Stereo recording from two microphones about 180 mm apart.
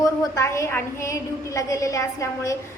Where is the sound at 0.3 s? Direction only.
15° left (ahead or behind).